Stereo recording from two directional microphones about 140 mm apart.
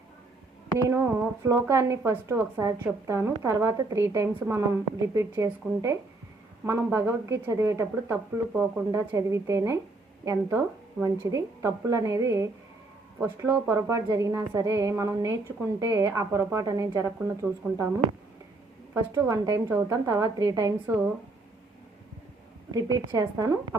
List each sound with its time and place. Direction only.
0.9 s a woman's voice: 20° right (ahead or behind)
18.9 s a woman's voice: 25° right (ahead or behind)
22.7 s a woman's voice: 25° right (ahead or behind)